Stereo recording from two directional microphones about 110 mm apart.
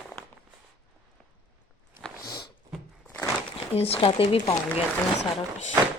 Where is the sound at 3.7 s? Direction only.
65° left (ahead or behind).